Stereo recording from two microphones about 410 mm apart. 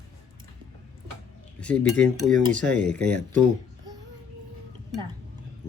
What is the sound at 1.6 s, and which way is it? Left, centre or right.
Speech, centre.